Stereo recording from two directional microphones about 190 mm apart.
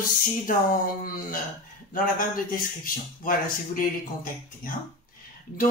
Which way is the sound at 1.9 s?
45° left (ahead or behind).